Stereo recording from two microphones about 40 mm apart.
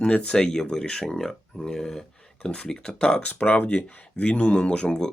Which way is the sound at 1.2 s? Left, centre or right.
Centre.